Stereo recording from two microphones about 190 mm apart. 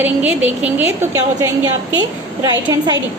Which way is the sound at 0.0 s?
10° right (ahead or behind).